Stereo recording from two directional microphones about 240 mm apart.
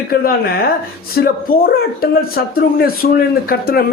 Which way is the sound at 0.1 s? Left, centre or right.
Left.